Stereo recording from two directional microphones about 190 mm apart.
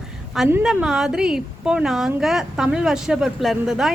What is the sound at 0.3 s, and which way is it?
A woman's voice, 5° right (ahead or behind).